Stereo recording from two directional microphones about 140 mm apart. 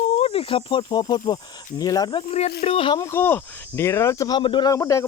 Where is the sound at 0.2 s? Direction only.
45° left (ahead or behind).